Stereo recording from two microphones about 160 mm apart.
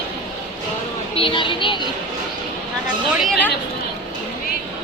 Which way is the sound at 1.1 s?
35° left (ahead or behind).